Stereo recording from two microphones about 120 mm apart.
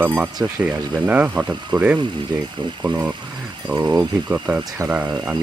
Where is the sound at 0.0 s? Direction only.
15° right (ahead or behind).